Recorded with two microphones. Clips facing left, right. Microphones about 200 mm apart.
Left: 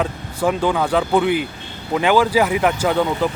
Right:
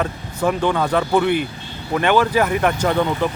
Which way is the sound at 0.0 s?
10° left (ahead or behind).